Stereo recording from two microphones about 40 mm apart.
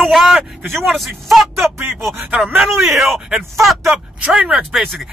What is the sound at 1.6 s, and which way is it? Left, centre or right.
Speech, right.